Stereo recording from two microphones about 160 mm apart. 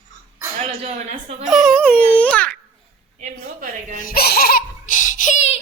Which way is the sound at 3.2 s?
55° right (ahead or behind).